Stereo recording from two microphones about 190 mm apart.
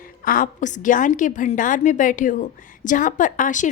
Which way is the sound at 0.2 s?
45° left (ahead or behind).